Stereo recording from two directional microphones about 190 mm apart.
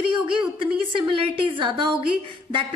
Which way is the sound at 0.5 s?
30° right (ahead or behind).